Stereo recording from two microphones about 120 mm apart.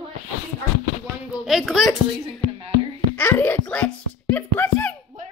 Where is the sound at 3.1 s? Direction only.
15° left (ahead or behind).